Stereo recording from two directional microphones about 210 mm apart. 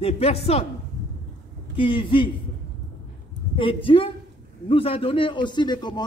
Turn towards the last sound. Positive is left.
turn(degrees=20)  # may be behind; listen again after turning